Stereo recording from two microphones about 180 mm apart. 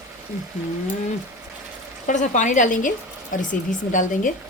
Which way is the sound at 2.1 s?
45° left (ahead or behind).